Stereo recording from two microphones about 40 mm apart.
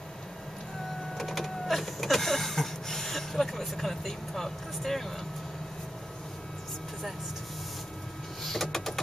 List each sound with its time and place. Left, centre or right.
1.1 s printer: centre
8.5 s printer: centre